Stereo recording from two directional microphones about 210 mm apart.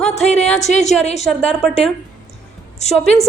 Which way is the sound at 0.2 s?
30° left (ahead or behind).